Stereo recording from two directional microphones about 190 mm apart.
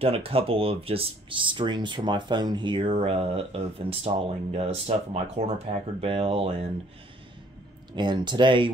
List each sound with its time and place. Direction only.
0.0 s speech: 30° right (ahead or behind)
7.9 s speech: 25° right (ahead or behind)